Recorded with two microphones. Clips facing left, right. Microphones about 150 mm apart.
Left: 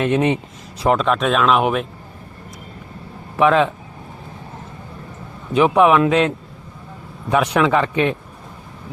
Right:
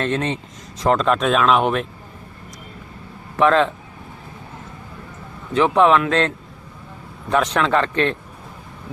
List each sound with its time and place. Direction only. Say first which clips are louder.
0.0 s a man's voice: left 5 dB; 15° left (ahead or behind)
3.3 s a man's voice: left 1 dB; 10° left (ahead or behind)
5.5 s a man's voice: left 2 dB; 10° left (ahead or behind)